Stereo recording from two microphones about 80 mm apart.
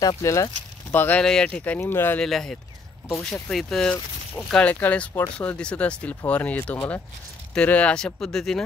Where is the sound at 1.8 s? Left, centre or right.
Left.